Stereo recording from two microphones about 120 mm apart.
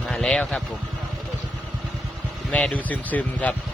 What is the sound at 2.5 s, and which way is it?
Speech, 10° left (ahead or behind).